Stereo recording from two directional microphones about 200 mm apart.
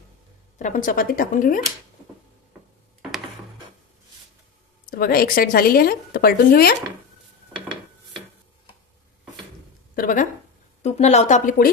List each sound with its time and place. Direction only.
0.6 s speech: 40° left (ahead or behind)
4.8 s speech: 45° left (ahead or behind)
7.5 s a sound: 25° right (ahead or behind)
9.9 s a woman's voice: 45° left (ahead or behind)